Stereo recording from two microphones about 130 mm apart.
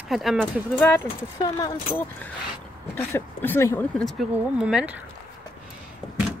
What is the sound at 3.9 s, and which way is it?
Speech, centre (ahead or behind).